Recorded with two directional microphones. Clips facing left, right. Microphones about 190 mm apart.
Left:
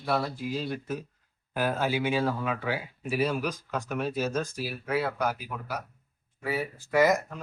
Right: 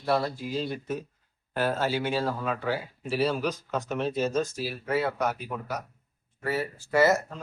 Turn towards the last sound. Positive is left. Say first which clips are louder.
# right 1 dB
turn(degrees=15)  # may be behind; listen again after turning